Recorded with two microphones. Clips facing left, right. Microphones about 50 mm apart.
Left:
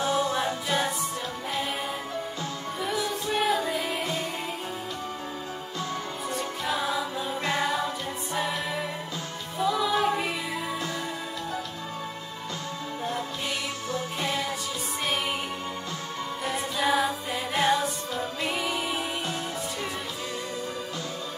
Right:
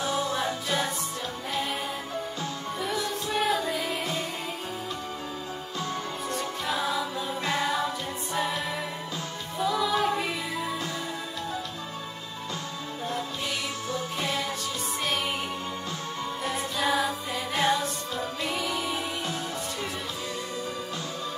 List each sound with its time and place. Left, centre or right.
0.2 s music: left
2.8 s music: centre
6.3 s music: centre
16.4 s music: centre